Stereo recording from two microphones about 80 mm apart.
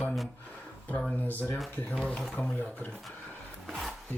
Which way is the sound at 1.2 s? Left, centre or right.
Left.